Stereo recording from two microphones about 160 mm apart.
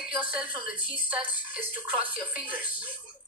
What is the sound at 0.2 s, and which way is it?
Speech, 10° right (ahead or behind).